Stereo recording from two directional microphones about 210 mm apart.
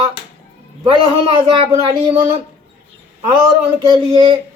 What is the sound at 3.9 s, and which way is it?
Speech, 20° right (ahead or behind).